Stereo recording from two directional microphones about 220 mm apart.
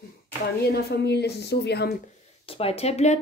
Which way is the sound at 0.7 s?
45° left (ahead or behind).